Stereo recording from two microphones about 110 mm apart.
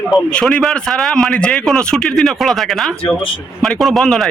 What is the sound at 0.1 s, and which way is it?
A man's voice, 5° left (ahead or behind).